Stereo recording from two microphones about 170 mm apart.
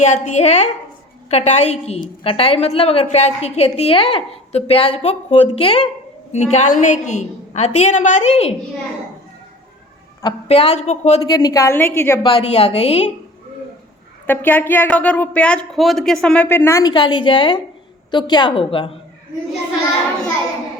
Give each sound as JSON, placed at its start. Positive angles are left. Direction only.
{"t": 0.0, "sound": "a woman's voice", "side_deg": 45}
{"t": 10.5, "sound": "a woman's voice", "side_deg": 35}
{"t": 11.3, "sound": "speech", "side_deg": 25}
{"t": 12.2, "sound": "a woman's voice", "side_deg": 35}
{"t": 14.3, "sound": "a woman's voice", "side_deg": 10}